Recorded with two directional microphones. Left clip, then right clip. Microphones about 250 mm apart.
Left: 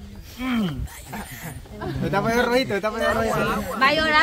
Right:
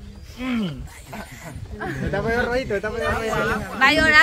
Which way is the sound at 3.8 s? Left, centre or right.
Centre.